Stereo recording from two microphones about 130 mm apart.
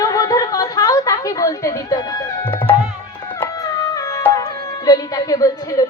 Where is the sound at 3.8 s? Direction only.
30° left (ahead or behind).